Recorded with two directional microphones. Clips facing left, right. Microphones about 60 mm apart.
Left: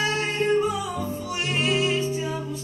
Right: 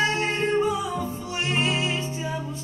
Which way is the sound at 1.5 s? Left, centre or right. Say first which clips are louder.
Left 3 dB; right.